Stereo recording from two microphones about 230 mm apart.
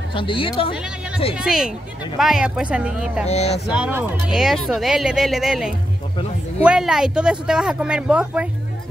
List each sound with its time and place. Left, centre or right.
0.1 s speech: left
0.7 s speech: centre
3.3 s speech: left
3.7 s speech: centre